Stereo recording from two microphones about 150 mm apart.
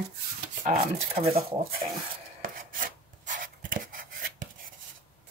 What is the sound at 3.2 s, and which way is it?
Writing, 60° right (ahead or behind).